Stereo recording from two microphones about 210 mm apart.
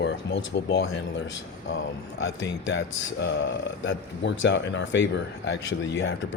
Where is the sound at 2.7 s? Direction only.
55° left (ahead or behind).